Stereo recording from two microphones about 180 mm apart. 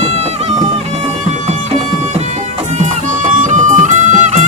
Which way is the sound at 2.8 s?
45° right (ahead or behind).